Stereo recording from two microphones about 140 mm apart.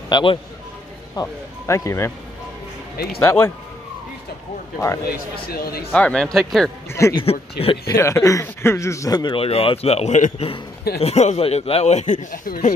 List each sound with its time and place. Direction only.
0.1 s speech: 40° left (ahead or behind)
1.2 s speech: 20° left (ahead or behind)
3.2 s speech: 15° left (ahead or behind)
5.5 s speech: 90° left
5.9 s speech: 5° left (ahead or behind)
6.9 s speech: 20° left (ahead or behind)
7.2 s speech: 40° left (ahead or behind)
7.8 s speech: 20° left (ahead or behind); by 12.7 s 70° left (ahead or behind)